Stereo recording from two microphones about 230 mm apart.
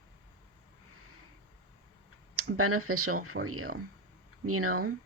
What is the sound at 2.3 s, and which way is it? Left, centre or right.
Speech, right.